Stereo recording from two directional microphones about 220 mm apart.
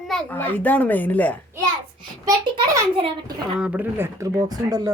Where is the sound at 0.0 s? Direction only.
5° left (ahead or behind).